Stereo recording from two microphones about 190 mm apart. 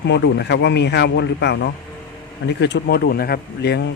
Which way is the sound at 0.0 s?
65° left (ahead or behind).